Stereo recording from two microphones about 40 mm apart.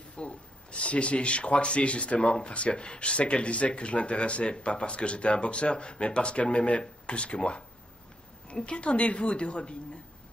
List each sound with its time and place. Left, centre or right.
0.2 s speech: left